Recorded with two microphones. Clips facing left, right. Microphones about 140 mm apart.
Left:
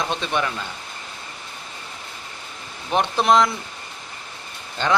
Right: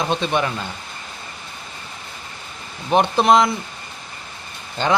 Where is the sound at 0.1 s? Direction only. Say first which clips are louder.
Right 5 dB; 35° right (ahead or behind).